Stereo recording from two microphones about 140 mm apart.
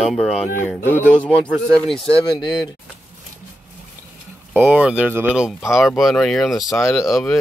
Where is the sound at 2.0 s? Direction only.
30° left (ahead or behind).